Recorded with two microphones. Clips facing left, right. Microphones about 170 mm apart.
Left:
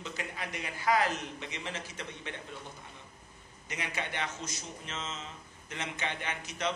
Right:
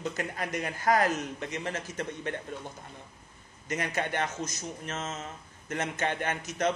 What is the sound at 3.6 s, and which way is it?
A man's voice, 45° right (ahead or behind).